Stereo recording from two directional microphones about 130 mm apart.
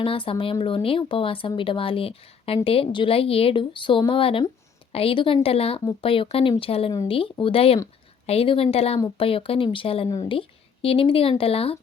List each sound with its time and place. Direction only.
0.0 s a woman's voice: 45° left (ahead or behind)